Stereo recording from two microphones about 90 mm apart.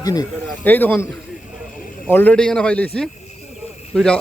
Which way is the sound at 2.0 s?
20° left (ahead or behind).